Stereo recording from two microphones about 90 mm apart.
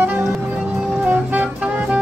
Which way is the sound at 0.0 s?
20° right (ahead or behind).